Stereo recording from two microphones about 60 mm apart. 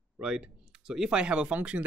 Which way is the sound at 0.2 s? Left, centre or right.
Centre.